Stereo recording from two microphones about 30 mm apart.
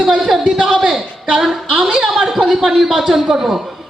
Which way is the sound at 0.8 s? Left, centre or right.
Centre.